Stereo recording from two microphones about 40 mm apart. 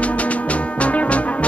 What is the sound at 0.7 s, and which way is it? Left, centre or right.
Brass instrument, left.